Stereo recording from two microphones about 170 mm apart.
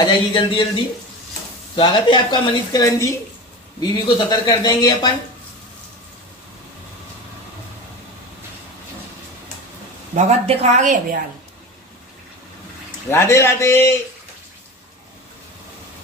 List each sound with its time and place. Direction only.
0.0 s speech: 30° left (ahead or behind)
1.8 s speech: 25° left (ahead or behind)
10.1 s speech: 40° right (ahead or behind)
13.1 s a man's voice: 15° left (ahead or behind)